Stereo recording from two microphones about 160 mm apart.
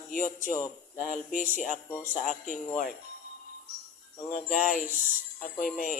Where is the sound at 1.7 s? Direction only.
15° left (ahead or behind).